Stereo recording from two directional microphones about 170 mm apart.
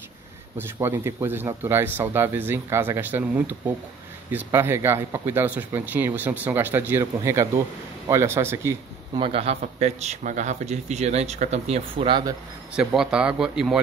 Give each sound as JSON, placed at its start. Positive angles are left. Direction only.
{"t": 0.6, "sound": "speech", "side_deg": -15}
{"t": 9.1, "sound": "speech", "side_deg": -35}
{"t": 12.7, "sound": "speech", "side_deg": -5}